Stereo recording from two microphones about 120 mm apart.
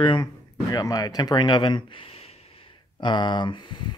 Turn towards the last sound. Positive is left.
turn(degrees=40)  # may be behind; listen again after turning